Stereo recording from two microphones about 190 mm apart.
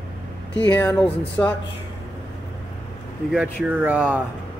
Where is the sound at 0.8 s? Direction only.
5° left (ahead or behind).